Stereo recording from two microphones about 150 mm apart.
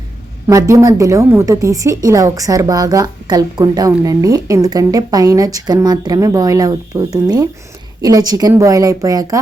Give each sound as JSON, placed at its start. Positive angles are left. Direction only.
{"t": 0.4, "sound": "a woman's voice", "side_deg": -20}